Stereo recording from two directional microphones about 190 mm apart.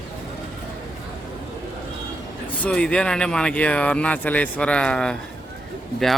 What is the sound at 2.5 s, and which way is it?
Speech, 5° left (ahead or behind).